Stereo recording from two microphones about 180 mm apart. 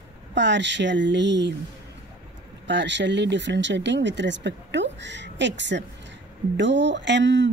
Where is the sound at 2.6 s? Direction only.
80° right.